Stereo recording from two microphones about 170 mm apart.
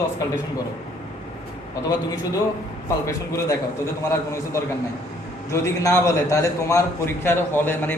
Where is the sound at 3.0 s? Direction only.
15° left (ahead or behind).